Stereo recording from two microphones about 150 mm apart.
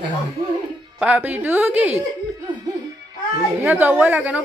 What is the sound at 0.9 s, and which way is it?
A woman's voice, 10° right (ahead or behind).